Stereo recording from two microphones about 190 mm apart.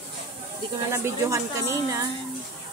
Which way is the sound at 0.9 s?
15° right (ahead or behind).